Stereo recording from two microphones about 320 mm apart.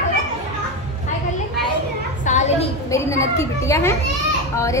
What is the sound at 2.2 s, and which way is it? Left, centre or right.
Speech, left.